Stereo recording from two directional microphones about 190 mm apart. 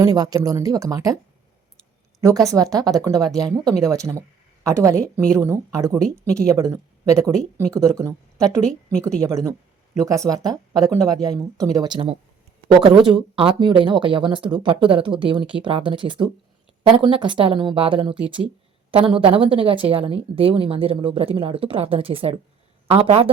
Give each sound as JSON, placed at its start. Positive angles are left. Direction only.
{"t": 0.0, "sound": "a woman's voice", "side_deg": -20}
{"t": 2.5, "sound": "a woman's voice", "side_deg": -20}